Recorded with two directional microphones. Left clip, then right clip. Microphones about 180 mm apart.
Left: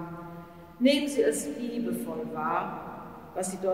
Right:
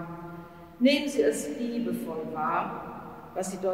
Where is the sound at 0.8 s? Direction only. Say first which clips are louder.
Even; 15° left (ahead or behind).